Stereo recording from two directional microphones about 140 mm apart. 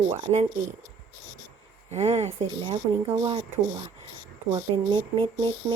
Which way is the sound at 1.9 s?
50° right (ahead or behind).